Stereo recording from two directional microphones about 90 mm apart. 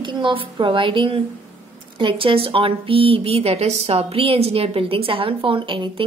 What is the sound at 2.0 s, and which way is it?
A woman's voice, 90° right.